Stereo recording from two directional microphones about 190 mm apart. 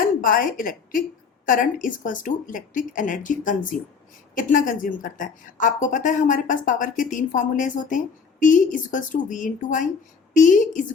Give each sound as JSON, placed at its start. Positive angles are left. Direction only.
{"t": 0.0, "sound": "a woman's voice", "side_deg": 45}